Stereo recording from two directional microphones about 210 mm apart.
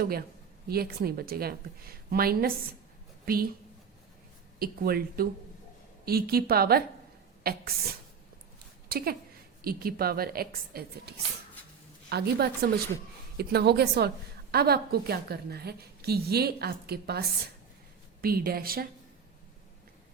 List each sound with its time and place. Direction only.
0.0 s a woman's voice: 45° right (ahead or behind)
4.6 s a woman's voice: 45° right (ahead or behind)
8.9 s a woman's voice: 45° right (ahead or behind)